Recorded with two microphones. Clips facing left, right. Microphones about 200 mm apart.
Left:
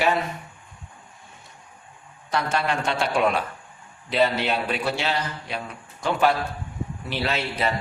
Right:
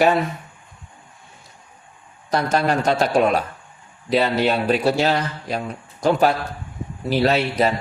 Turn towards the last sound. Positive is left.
turn(degrees=-40)  # may be behind; listen again after turning